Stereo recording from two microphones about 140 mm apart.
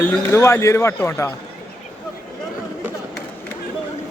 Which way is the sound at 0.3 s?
20° left (ahead or behind).